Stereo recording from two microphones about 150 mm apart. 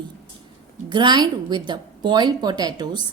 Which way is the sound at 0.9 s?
30° right (ahead or behind).